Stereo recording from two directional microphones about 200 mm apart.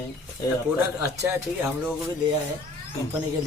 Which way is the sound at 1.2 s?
5° right (ahead or behind).